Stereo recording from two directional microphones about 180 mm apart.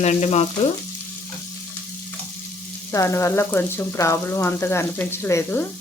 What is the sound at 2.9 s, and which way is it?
Frying, 15° left (ahead or behind).